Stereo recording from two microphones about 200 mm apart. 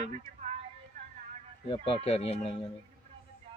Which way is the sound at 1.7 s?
25° left (ahead or behind).